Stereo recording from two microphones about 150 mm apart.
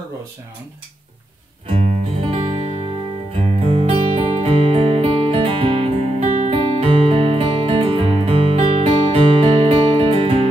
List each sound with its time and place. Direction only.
1.7 s music: 45° right (ahead or behind)